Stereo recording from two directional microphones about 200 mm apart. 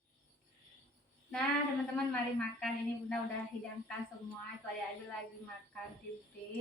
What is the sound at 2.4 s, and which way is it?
Speech, 5° left (ahead or behind).